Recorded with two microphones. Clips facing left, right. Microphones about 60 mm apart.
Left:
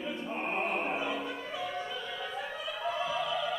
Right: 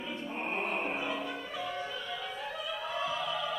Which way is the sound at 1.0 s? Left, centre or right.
Centre.